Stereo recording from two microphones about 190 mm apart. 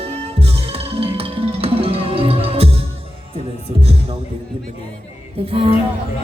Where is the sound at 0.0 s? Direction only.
30° right (ahead or behind).